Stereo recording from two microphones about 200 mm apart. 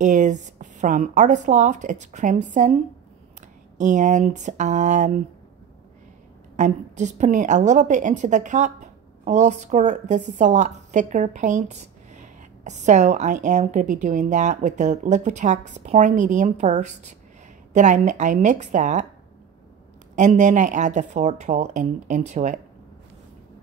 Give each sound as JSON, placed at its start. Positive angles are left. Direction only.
{"t": 0.0, "sound": "a woman's voice", "side_deg": -40}
{"t": 6.5, "sound": "a woman's voice", "side_deg": -35}
{"t": 20.2, "sound": "a woman's voice", "side_deg": -35}